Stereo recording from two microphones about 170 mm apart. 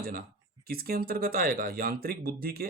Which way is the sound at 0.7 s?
60° right (ahead or behind).